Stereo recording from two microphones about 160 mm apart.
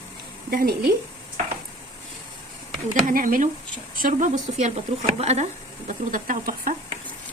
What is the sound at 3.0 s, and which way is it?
A woman's voice, 60° right (ahead or behind).